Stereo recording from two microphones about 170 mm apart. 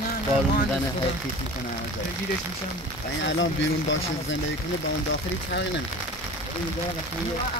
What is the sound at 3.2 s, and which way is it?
Speech, 90° left.